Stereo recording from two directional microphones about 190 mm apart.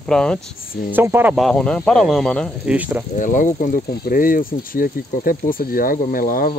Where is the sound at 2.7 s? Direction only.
5° right (ahead or behind).